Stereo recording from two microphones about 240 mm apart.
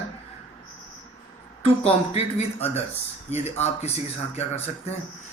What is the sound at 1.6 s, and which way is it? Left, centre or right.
Speech, left.